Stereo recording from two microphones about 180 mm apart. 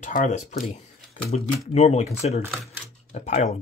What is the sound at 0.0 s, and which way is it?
Speech, 45° left (ahead or behind).